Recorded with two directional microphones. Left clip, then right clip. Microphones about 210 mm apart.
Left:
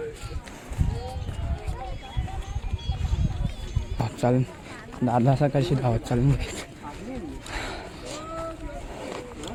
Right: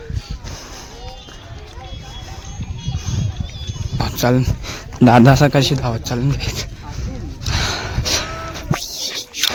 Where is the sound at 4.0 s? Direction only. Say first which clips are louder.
Right 7 dB; 25° right (ahead or behind).